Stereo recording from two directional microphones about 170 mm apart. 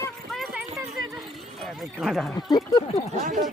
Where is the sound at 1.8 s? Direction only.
5° right (ahead or behind).